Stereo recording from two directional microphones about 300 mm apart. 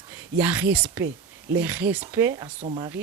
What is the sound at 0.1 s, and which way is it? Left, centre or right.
Speech, centre.